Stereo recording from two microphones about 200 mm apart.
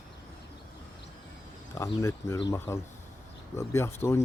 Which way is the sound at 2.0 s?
15° left (ahead or behind).